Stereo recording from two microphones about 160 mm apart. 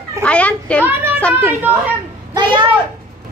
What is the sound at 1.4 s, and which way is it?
Speech, 10° right (ahead or behind).